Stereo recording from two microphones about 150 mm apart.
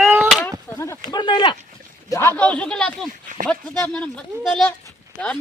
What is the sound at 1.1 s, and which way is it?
Speech, 30° left (ahead or behind).